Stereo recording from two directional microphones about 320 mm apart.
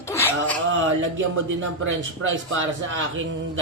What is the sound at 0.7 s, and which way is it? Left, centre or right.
Speech, right.